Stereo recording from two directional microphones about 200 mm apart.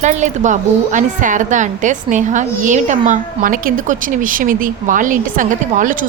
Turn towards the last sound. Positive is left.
turn(degrees=-40)  # may be behind; listen again after turning